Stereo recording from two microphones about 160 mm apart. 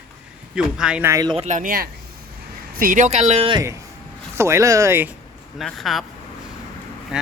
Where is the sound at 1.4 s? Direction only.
50° right (ahead or behind).